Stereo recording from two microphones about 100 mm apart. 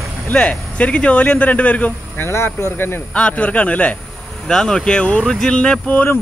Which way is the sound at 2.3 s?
25° left (ahead or behind).